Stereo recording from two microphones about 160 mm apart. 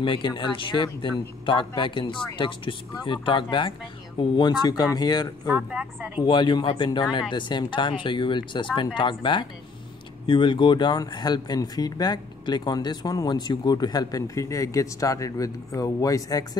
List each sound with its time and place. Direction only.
0.0 s speech: 30° left (ahead or behind)
5.5 s a woman's voice: 10° right (ahead or behind)
6.2 s speech: 30° left (ahead or behind)